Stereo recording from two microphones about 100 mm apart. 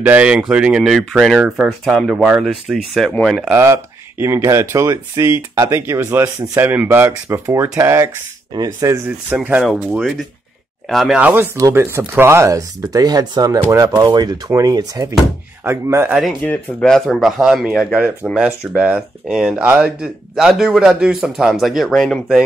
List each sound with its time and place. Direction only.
0.0 s a man's voice: 15° right (ahead or behind); by 3.4 s 5° left (ahead or behind)
3.5 s speech: 25° right (ahead or behind)
6.6 s speech: 20° right (ahead or behind)
9.3 s speech: 15° right (ahead or behind)
9.9 s a man's voice: 5° right (ahead or behind)
11.1 s speech: 20° right (ahead or behind); by 13.6 s 40° right (ahead or behind)
13.6 s speech: 25° right (ahead or behind)
13.8 s speech: 40° right (ahead or behind)
15.6 s speech: 25° right (ahead or behind)
16.4 s a man's voice: 5° left (ahead or behind)